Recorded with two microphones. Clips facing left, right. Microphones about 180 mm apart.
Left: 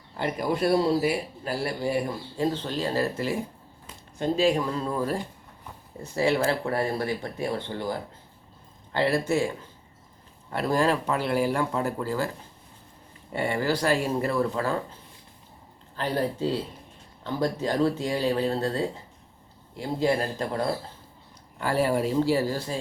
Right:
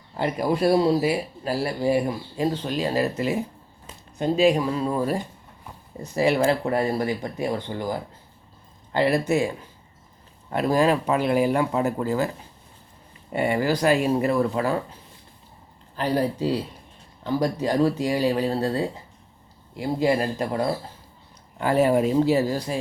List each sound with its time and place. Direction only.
0.2 s speech: 25° right (ahead or behind)
13.3 s speech: 15° right (ahead or behind)
16.0 s speech: 15° right (ahead or behind)